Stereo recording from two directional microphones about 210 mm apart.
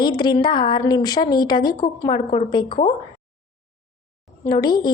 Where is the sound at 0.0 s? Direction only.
20° left (ahead or behind).